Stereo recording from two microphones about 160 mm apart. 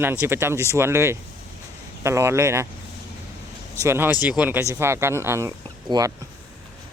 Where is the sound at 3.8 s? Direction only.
15° right (ahead or behind).